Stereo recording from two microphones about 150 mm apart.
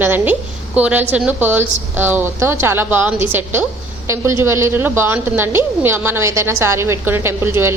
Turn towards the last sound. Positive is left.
turn(degrees=-15)  # may be behind; listen again after turning